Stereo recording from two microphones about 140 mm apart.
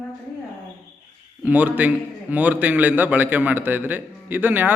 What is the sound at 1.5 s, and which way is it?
A man's voice, 10° right (ahead or behind).